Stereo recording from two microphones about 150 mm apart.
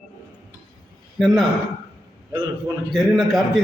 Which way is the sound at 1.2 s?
Centre (ahead or behind).